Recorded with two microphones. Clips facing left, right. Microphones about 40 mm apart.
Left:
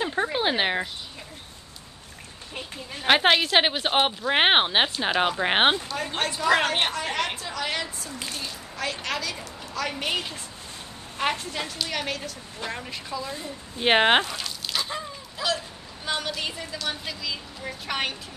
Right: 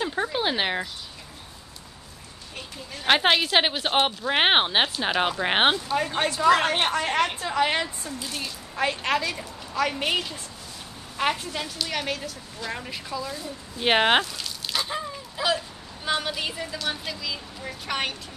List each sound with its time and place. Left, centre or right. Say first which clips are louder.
0.0 s a sound: left 1 dB; centre
2.5 s a sound: left 2 dB; left
3.1 s speech: left 1 dB; centre
6.9 s a woman's voice: right 4 dB; right; by 10.2 s centre
11.5 s speech: even; centre
13.2 s a woman's voice: right 1 dB; left
13.7 s speech: left 1 dB; centre
14.7 s a sound: right 2 dB; centre
16.1 s speech: right 2 dB; centre